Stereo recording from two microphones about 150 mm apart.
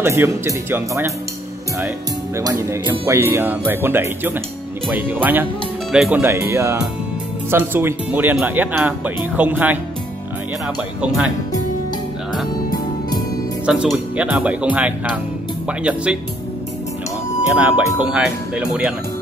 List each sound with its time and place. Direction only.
0.0 s speech: 15° right (ahead or behind)
2.3 s speech: 20° right (ahead or behind); by 6.2 s 5° right (ahead or behind)
6.2 s speech: 20° right (ahead or behind)
13.7 s speech: 5° right (ahead or behind)
17.6 s speech: 10° right (ahead or behind)